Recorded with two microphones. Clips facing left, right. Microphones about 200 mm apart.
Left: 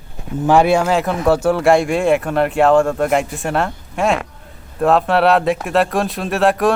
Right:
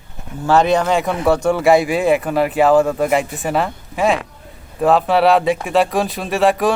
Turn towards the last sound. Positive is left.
turn(degrees=0)  # may be behind; listen again after turning